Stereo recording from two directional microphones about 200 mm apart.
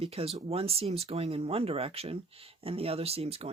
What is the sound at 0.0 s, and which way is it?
Speech, 30° right (ahead or behind).